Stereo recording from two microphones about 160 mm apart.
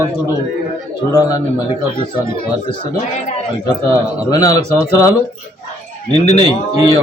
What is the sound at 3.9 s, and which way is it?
A man's voice, 25° left (ahead or behind).